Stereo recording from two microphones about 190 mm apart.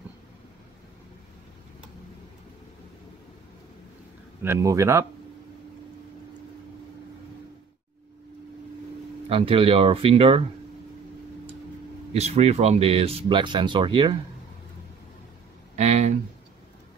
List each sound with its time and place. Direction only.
4.4 s speech: 15° right (ahead or behind)
9.3 s speech: 30° right (ahead or behind)
12.1 s speech: 35° right (ahead or behind)
15.7 s a sound: 35° right (ahead or behind)